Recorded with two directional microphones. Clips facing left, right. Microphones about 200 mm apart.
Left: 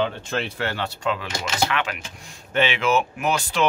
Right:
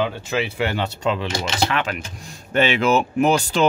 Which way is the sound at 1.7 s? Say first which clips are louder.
Right 3 dB; 40° right (ahead or behind).